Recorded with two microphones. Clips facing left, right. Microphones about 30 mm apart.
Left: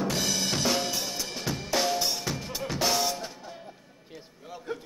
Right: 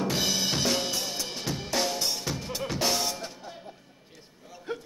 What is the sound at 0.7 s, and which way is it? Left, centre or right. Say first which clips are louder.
Drum kit: even; centre.